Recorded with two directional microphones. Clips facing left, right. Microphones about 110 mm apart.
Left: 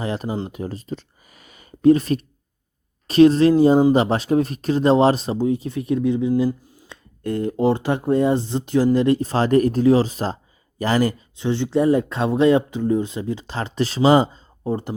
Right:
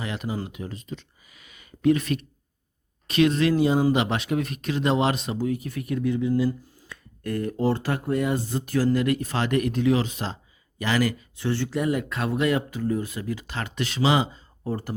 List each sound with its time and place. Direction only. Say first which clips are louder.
0.0 s speech: left 5 dB; 35° left (ahead or behind)
14.6 s speech: left 5 dB; 25° left (ahead or behind)